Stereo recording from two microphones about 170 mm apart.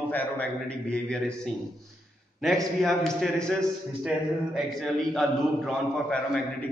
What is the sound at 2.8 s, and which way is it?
A man's voice, centre (ahead or behind).